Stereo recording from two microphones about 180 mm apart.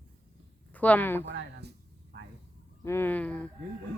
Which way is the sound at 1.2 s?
75° right (ahead or behind).